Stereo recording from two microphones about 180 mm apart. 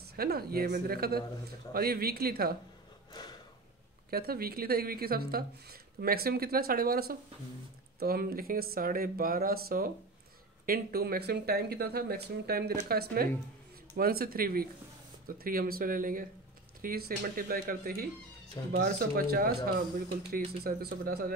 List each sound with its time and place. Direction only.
0.0 s speech: 60° right (ahead or behind)
4.1 s speech: 60° right (ahead or behind)
20.6 s speech: 55° right (ahead or behind)